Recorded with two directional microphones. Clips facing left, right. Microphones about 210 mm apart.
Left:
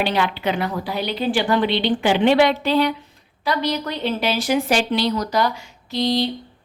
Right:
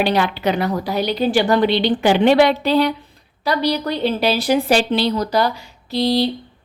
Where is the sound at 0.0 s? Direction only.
40° right (ahead or behind).